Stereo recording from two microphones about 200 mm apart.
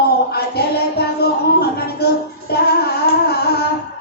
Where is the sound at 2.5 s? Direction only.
50° left (ahead or behind).